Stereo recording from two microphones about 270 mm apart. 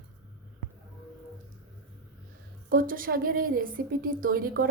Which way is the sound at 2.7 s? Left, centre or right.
Right.